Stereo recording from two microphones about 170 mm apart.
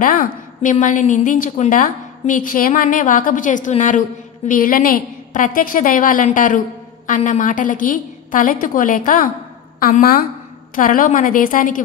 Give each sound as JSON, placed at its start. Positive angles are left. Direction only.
{"t": 0.0, "sound": "a woman's voice", "side_deg": 50}